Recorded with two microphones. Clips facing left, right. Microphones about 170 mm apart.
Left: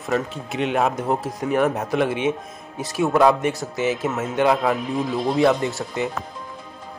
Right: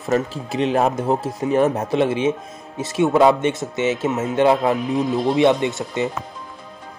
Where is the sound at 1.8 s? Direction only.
25° right (ahead or behind).